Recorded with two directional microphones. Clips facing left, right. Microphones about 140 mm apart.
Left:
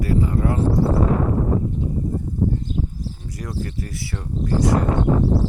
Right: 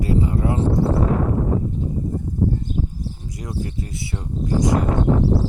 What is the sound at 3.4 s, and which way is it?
Speech, 20° right (ahead or behind).